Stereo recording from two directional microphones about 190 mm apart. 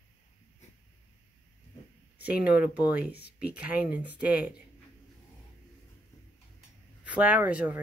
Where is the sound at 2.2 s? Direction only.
5° right (ahead or behind).